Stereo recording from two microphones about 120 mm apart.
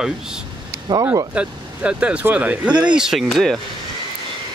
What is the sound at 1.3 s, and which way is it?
Speech, 10° right (ahead or behind).